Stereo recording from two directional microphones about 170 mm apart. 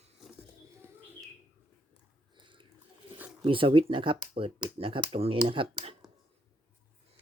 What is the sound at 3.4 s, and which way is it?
Speech, 30° right (ahead or behind).